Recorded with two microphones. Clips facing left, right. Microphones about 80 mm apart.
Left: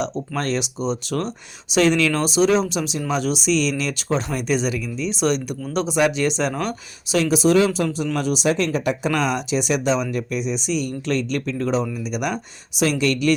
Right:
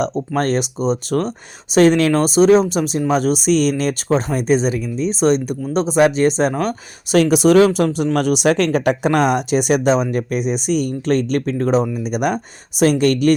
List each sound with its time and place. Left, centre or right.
0.0 s speech: right
7.1 s speech: right